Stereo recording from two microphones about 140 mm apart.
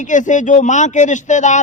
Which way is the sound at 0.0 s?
65° left (ahead or behind).